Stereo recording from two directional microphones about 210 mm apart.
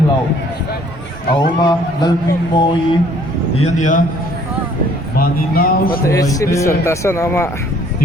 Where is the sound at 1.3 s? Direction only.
20° left (ahead or behind).